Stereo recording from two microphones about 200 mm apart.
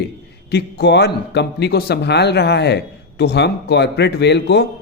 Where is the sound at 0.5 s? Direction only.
55° left (ahead or behind).